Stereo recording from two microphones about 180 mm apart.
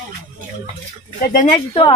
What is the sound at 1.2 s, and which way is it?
Speech, 50° left (ahead or behind).